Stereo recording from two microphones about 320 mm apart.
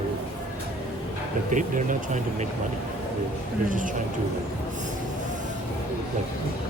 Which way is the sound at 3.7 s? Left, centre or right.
Right.